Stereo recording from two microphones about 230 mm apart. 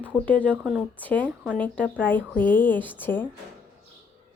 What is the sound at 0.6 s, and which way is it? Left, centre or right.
Speech, centre.